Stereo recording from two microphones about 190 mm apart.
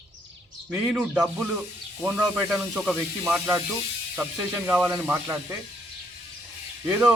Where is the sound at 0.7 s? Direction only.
5° right (ahead or behind).